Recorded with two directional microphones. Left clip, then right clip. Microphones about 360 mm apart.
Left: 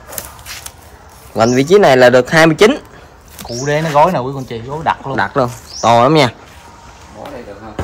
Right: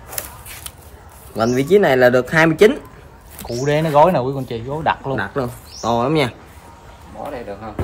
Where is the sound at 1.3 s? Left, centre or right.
Left.